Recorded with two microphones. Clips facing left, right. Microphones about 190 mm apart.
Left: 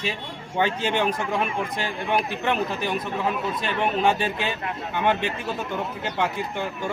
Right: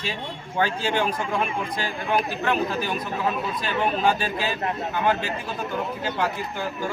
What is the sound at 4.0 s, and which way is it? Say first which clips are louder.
A man's voice: left 1 dB; 25° left (ahead or behind).